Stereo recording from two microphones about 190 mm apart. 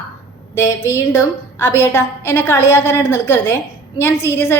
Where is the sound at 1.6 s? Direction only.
15° left (ahead or behind).